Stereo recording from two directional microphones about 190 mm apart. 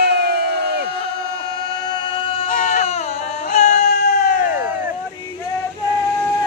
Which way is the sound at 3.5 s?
40° left (ahead or behind).